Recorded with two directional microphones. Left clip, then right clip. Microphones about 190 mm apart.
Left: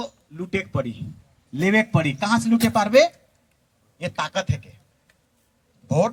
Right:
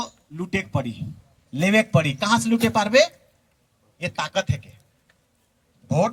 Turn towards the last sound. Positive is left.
turn(degrees=20)  # may be behind; listen again after turning